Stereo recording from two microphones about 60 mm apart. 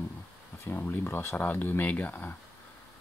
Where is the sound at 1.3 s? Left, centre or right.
Left.